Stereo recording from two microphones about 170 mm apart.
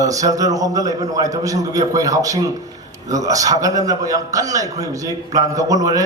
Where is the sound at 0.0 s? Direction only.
20° right (ahead or behind).